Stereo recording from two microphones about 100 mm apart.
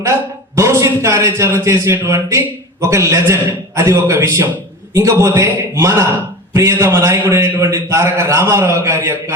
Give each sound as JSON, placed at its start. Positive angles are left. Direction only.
{"t": 0.0, "sound": "a man's voice", "side_deg": -25}